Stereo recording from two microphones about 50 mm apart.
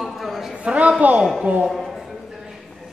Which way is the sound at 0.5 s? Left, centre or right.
Right.